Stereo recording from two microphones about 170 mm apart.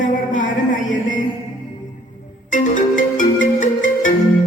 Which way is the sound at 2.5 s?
50° left (ahead or behind).